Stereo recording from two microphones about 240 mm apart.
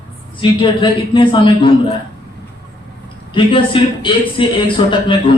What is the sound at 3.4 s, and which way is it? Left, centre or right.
A man's voice, left.